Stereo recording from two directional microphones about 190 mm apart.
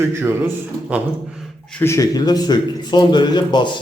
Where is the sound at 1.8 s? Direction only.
15° left (ahead or behind).